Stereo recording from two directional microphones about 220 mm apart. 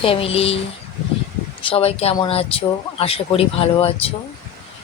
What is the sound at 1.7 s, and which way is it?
Speech, 25° left (ahead or behind).